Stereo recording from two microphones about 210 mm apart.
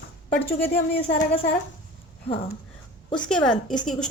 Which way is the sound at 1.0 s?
25° left (ahead or behind).